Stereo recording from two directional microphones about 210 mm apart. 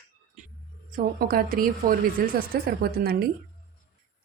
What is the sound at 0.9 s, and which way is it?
Speech, 45° right (ahead or behind).